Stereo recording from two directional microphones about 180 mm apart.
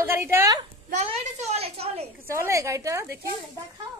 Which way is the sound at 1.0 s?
35° right (ahead or behind).